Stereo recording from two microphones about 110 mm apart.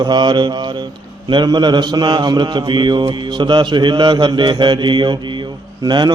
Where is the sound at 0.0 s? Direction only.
45° right (ahead or behind).